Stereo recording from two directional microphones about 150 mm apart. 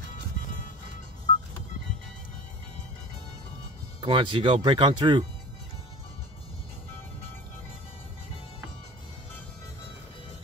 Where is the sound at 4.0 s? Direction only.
35° right (ahead or behind).